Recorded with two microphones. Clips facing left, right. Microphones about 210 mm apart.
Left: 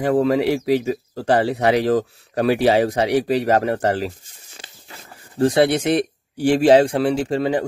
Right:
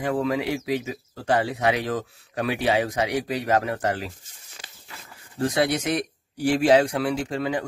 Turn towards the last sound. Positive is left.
turn(degrees=30)  # may be behind; listen again after turning